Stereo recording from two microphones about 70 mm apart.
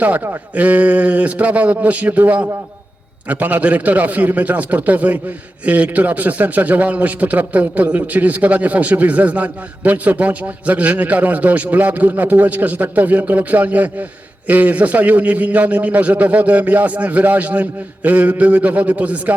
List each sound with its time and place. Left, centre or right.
0.0 s a man's voice: right